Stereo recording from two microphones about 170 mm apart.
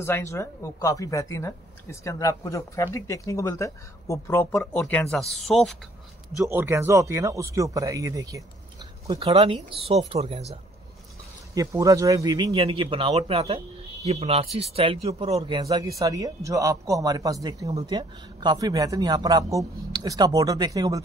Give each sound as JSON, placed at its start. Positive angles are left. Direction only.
{"t": 0.0, "sound": "speech", "side_deg": 15}
{"t": 6.4, "sound": "speech", "side_deg": -15}
{"t": 9.1, "sound": "speech", "side_deg": -35}
{"t": 11.5, "sound": "speech", "side_deg": -20}